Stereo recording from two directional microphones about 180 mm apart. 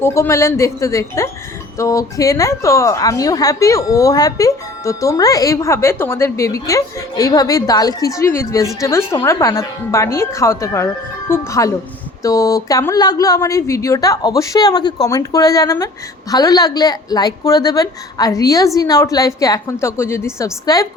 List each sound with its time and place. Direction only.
0.0 s a woman's voice: 15° left (ahead or behind)